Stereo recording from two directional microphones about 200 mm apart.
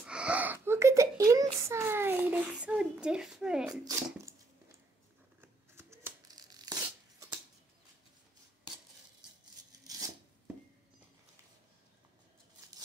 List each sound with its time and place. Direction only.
0.0 s a sound: 5° right (ahead or behind)
5.4 s hands: 10° right (ahead or behind)
9.7 s scissors: 20° right (ahead or behind)